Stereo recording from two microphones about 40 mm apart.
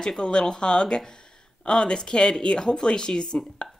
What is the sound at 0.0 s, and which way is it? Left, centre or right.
Speech, left.